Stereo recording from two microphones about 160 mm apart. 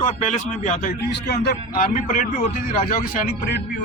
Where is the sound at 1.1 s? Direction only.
90° left.